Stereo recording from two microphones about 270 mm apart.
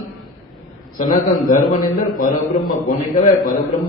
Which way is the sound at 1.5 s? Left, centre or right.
Left.